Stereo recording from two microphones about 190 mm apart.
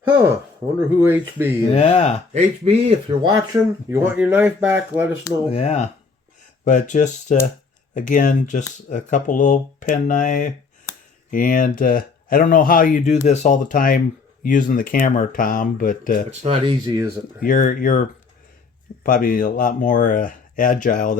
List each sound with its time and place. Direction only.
0.8 s speech: 10° right (ahead or behind)
1.7 s speech: 35° left (ahead or behind)
2.3 s speech: 30° right (ahead or behind)
3.8 s speech: 10° right (ahead or behind)
5.5 s speech: 30° left (ahead or behind); by 16.2 s 45° left (ahead or behind)
16.4 s speech: 30° right (ahead or behind)
16.8 s speech: 20° right (ahead or behind)
17.4 s speech: 45° left (ahead or behind)
19.0 s speech: 45° left (ahead or behind)